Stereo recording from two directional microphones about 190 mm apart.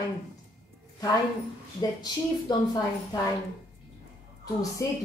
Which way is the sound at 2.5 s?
20° left (ahead or behind).